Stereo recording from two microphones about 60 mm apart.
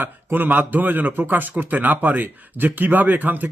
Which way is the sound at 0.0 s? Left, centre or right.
Right.